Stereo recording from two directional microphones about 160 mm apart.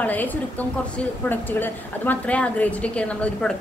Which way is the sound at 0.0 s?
10° left (ahead or behind).